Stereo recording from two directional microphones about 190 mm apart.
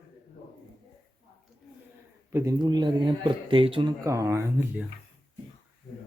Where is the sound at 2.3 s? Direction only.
15° right (ahead or behind).